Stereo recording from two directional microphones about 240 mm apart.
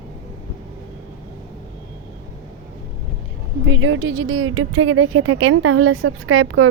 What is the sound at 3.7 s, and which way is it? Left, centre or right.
A woman's voice, right.